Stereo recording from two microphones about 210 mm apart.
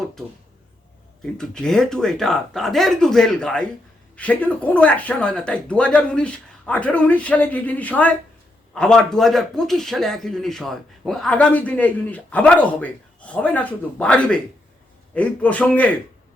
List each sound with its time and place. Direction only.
1.4 s a man's voice: 5° left (ahead or behind)